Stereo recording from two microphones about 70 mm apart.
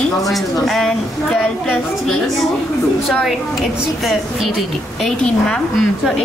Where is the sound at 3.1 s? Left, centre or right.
Centre.